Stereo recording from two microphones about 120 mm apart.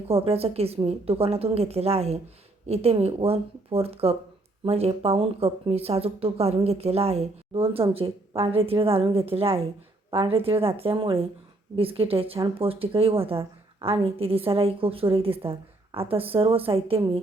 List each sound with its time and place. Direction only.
0.1 s a woman's voice: 55° right (ahead or behind)